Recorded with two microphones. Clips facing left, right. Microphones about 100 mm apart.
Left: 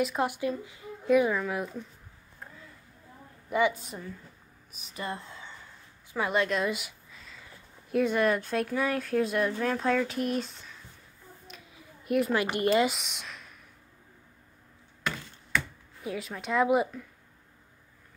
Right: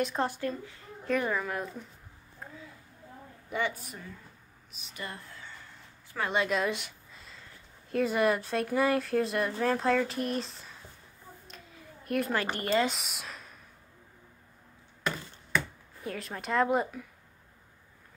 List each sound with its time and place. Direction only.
0.0 s speech: 10° left (ahead or behind)
3.4 s a woman's voice: 5° left (ahead or behind)
4.9 s speech: 25° left (ahead or behind)
6.1 s speech: 5° left (ahead or behind)
6.4 s a sound: centre (ahead or behind)
7.9 s speech: centre (ahead or behind)
11.4 s a sound: 5° left (ahead or behind)
12.4 s speech: 15° left (ahead or behind)
12.9 s speech: centre (ahead or behind)
16.0 s speech: 5° left (ahead or behind)